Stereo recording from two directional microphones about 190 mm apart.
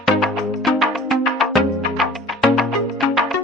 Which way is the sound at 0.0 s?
Centre (ahead or behind).